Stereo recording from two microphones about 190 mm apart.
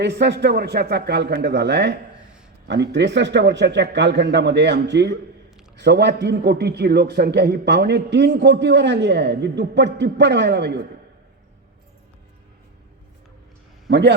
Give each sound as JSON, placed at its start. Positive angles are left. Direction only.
{"t": 0.0, "sound": "a man's voice", "side_deg": -65}